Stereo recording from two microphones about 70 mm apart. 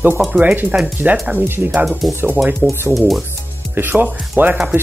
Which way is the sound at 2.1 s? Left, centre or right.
Right.